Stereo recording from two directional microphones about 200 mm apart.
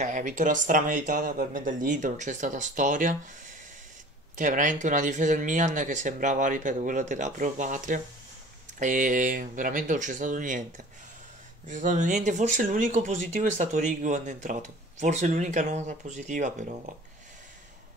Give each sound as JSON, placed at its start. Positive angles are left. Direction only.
{"t": 0.0, "sound": "speech", "side_deg": -40}
{"t": 4.4, "sound": "speech", "side_deg": -40}
{"t": 11.6, "sound": "speech", "side_deg": -40}